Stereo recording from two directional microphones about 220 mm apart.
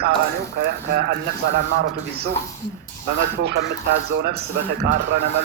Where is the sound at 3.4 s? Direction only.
50° right (ahead or behind).